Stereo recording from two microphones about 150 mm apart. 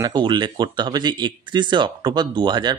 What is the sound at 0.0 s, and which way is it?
Speech, 30° right (ahead or behind).